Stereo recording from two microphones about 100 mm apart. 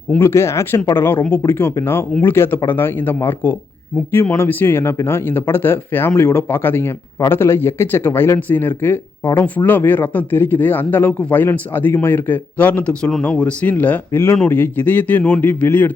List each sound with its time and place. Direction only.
0.2 s speech: 25° left (ahead or behind)